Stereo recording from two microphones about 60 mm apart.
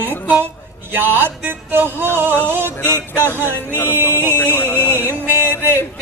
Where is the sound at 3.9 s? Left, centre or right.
Right.